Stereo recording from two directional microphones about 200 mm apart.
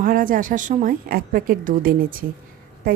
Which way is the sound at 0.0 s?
45° right (ahead or behind).